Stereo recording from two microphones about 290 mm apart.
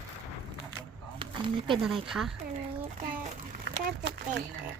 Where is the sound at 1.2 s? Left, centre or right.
Centre.